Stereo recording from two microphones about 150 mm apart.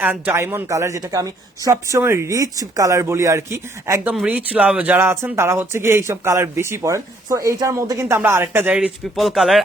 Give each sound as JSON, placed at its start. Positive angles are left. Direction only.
{"t": 0.0, "sound": "speech", "side_deg": -10}
{"t": 4.1, "sound": "speech", "side_deg": -10}